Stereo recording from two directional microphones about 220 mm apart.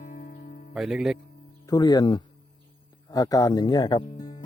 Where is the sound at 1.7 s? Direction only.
15° left (ahead or behind).